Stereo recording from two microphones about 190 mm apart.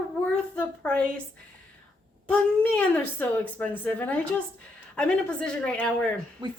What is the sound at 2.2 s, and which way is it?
A woman's voice, 5° left (ahead or behind).